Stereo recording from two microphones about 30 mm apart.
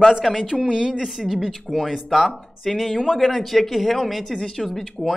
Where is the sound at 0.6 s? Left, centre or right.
Right.